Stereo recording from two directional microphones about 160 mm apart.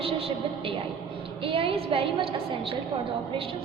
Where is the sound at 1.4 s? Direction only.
35° right (ahead or behind).